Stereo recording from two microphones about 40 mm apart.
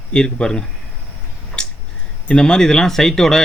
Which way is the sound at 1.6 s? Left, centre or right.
Centre.